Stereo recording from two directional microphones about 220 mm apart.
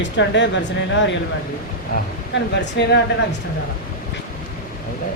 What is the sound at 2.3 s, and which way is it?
Speech, 50° left (ahead or behind).